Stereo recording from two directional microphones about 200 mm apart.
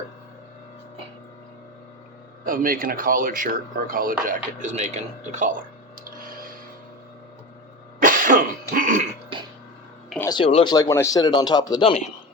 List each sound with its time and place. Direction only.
2.4 s speech: 45° right (ahead or behind)
6.1 s a sound: 45° right (ahead or behind)
8.0 s throat clearing: 45° right (ahead or behind)
10.2 s speech: 20° left (ahead or behind)